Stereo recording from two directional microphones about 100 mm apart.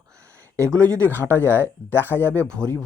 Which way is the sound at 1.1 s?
20° left (ahead or behind).